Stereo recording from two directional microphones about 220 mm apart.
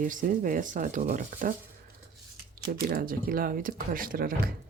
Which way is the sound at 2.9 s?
40° right (ahead or behind).